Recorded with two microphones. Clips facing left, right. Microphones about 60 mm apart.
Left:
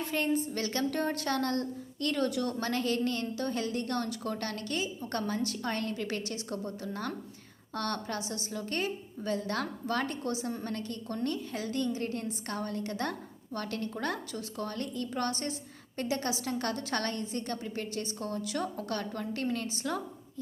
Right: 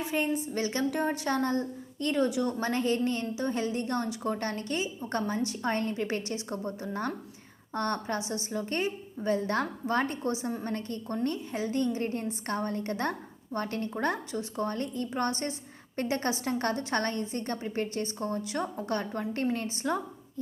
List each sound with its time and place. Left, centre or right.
0.0 s a woman's voice: centre; by 20.0 s right